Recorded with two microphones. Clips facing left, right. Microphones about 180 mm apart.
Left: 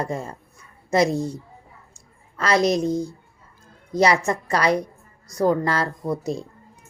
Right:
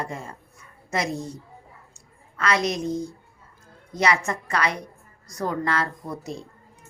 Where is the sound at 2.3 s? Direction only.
35° left (ahead or behind).